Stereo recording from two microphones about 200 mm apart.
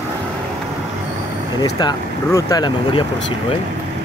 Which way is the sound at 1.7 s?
20° left (ahead or behind).